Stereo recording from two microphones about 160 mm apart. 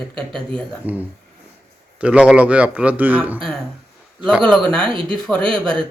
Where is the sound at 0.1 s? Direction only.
30° right (ahead or behind).